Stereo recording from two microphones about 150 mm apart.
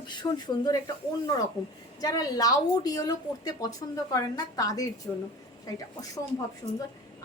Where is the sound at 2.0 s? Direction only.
25° left (ahead or behind).